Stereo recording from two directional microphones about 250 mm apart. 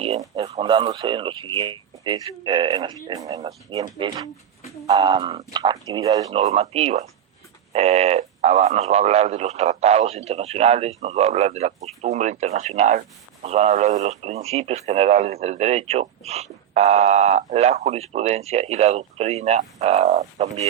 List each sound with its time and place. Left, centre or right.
0.2 s speech: right
6.4 s speech: right